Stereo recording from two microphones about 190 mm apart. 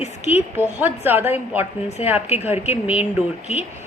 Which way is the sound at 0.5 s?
10° right (ahead or behind).